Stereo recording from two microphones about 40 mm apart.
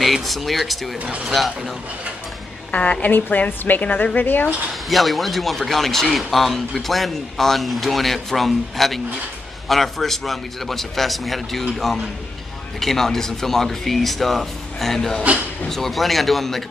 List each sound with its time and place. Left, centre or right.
0.0 s speech: centre
0.9 s speech: right
1.2 s speech: centre
2.7 s a woman's voice: left
3.1 s a woman's voice: left
4.8 s speech: centre